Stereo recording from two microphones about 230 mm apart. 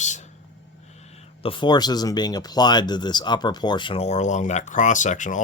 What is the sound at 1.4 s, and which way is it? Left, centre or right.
Speech, left.